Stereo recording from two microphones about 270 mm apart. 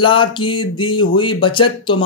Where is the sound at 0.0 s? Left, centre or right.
Centre.